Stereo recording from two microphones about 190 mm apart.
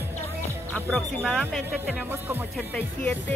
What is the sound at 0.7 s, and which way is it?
Speech, 5° left (ahead or behind).